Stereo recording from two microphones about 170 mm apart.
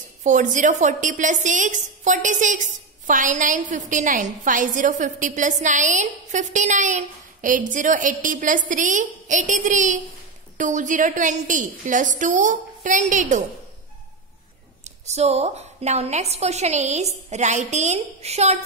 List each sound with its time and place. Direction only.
0.2 s a woman's voice: 45° right (ahead or behind)
15.0 s a woman's voice: 40° right (ahead or behind)